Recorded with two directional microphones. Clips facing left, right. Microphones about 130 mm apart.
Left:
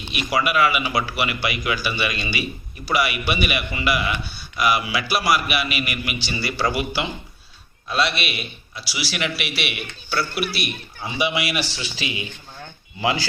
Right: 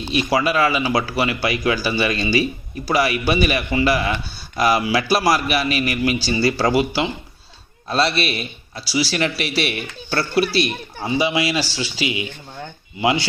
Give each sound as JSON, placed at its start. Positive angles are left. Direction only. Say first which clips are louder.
{"t": 0.0, "sound": "a man's voice", "louder": "right 4 dB", "side_deg": -30}
{"t": 7.9, "sound": "a man's voice", "louder": "right 4 dB", "side_deg": -35}
{"t": 11.0, "sound": "speech", "louder": "right 4 dB", "side_deg": -30}